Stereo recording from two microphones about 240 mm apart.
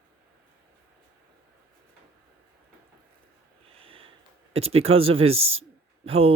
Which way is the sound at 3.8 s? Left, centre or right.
Right.